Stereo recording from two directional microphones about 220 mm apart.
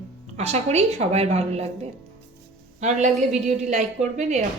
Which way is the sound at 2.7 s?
30° right (ahead or behind).